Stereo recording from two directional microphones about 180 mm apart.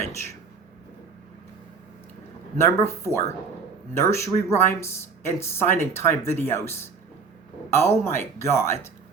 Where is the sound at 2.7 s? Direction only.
15° left (ahead or behind).